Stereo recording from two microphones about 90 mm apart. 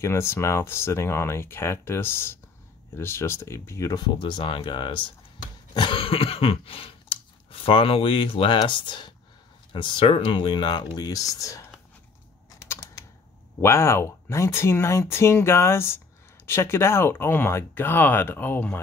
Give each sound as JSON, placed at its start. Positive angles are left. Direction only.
{"t": 0.0, "sound": "speech", "side_deg": 30}
{"t": 3.9, "sound": "speech", "side_deg": 55}
{"t": 5.8, "sound": "cough", "side_deg": 80}
{"t": 8.6, "sound": "speech", "side_deg": 65}
{"t": 11.0, "sound": "speech", "side_deg": 45}
{"t": 13.6, "sound": "speech", "side_deg": 30}